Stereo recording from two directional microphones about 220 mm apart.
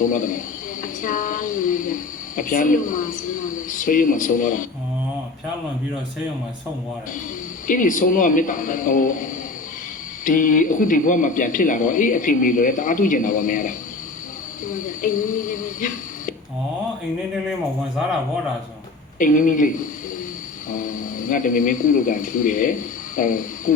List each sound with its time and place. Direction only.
0.0 s a woman's voice: 35° left (ahead or behind)
7.7 s a woman's voice: 35° left (ahead or behind)
19.2 s a woman's voice: 35° left (ahead or behind)